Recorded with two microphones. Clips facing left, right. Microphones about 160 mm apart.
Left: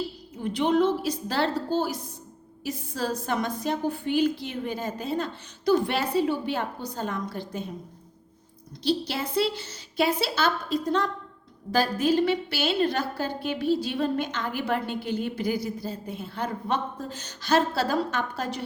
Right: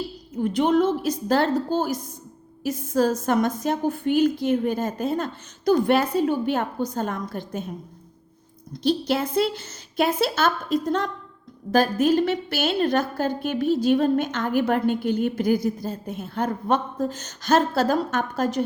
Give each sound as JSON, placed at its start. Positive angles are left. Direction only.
{"t": 0.4, "sound": "a woman's voice", "side_deg": -45}
{"t": 8.8, "sound": "a woman's voice", "side_deg": -50}